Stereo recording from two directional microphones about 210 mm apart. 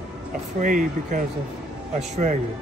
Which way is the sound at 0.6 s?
40° right (ahead or behind).